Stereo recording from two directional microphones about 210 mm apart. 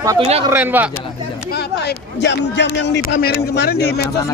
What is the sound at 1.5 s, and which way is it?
A man's voice, 50° left (ahead or behind).